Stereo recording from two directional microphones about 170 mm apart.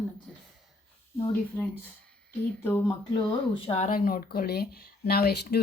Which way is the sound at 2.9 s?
25° left (ahead or behind).